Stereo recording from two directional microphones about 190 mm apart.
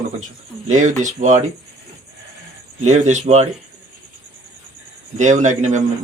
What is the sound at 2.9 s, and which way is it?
Speech, 35° right (ahead or behind).